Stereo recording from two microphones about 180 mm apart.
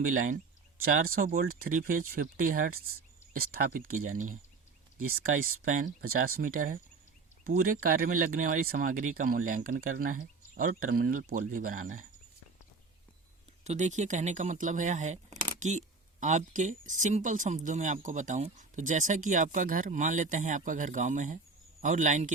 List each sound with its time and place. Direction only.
0.1 s speech: 50° right (ahead or behind)
7.8 s speech: 55° right (ahead or behind)
13.7 s speech: 40° right (ahead or behind)